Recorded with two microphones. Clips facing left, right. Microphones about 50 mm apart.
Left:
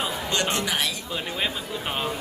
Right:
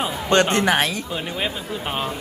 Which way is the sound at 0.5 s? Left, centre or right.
Right.